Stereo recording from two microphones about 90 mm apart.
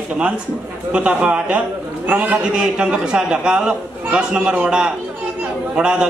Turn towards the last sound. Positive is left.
turn(degrees=-10)  # may be behind; listen again after turning